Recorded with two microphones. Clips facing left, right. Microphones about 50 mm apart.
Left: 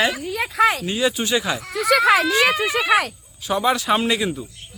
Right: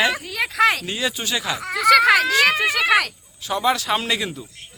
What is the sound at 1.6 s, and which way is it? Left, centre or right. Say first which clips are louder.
Speech: right 6 dB; right.